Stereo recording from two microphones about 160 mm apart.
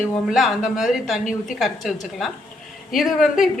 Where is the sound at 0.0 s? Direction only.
Centre (ahead or behind).